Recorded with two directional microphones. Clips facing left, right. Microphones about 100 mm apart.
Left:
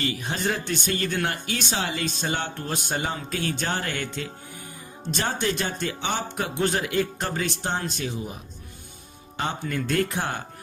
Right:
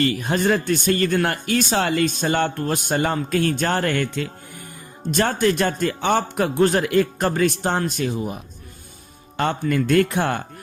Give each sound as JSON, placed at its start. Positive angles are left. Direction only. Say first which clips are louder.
{"t": 0.0, "sound": "speech", "louder": "right 7 dB", "side_deg": -55}
{"t": 9.4, "sound": "speech", "louder": "right 7 dB", "side_deg": -65}